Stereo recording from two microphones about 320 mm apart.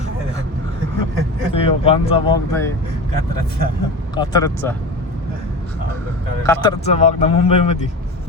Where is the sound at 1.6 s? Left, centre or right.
Centre.